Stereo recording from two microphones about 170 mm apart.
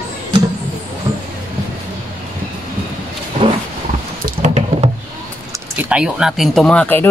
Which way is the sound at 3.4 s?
30° right (ahead or behind).